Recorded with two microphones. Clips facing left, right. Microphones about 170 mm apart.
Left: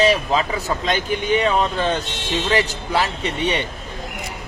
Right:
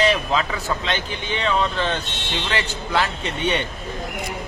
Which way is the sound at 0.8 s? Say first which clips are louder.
Left 6 dB; 45° left (ahead or behind).